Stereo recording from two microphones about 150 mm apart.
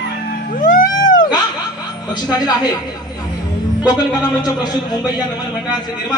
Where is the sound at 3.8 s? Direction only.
25° left (ahead or behind).